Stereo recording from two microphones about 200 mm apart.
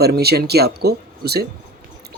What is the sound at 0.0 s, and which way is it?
Speech, 55° right (ahead or behind).